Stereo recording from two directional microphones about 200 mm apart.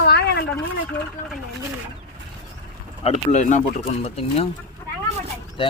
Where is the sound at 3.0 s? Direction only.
30° left (ahead or behind).